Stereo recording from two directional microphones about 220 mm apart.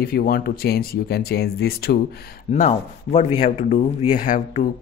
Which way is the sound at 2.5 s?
30° left (ahead or behind).